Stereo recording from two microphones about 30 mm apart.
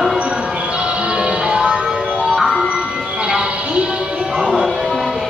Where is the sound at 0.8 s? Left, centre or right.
Right.